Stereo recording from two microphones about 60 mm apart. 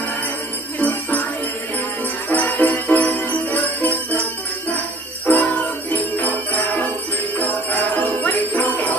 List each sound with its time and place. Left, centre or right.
0.7 s jingle bell: left
2.2 s jingle bell: left